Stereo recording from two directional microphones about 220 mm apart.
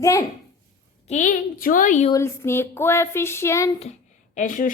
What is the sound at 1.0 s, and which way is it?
A woman's voice, 35° left (ahead or behind).